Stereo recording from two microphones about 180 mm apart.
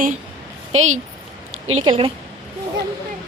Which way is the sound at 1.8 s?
30° right (ahead or behind).